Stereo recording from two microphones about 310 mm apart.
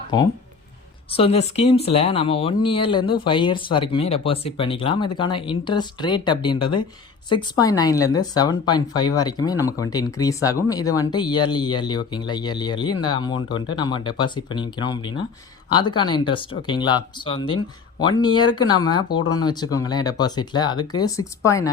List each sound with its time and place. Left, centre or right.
0.1 s speech: centre